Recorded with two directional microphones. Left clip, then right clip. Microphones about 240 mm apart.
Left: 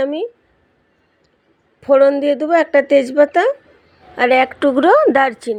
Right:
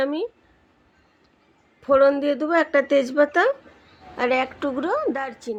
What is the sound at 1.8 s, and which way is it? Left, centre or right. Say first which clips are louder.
A woman's voice: left 6 dB; centre.